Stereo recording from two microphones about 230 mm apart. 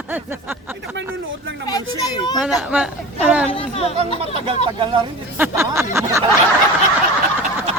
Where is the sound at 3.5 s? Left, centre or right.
Left.